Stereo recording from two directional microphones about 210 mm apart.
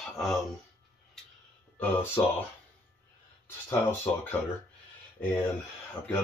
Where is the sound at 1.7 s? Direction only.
10° left (ahead or behind).